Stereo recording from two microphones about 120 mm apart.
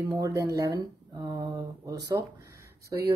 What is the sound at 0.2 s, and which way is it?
Speech, 30° right (ahead or behind).